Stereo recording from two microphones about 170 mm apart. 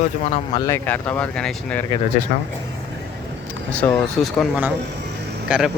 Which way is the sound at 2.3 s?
45° left (ahead or behind).